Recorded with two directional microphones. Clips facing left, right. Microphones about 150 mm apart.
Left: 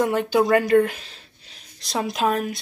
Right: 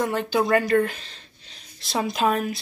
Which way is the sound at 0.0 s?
15° left (ahead or behind).